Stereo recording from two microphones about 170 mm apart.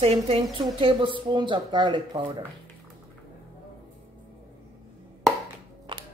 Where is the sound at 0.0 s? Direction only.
35° right (ahead or behind).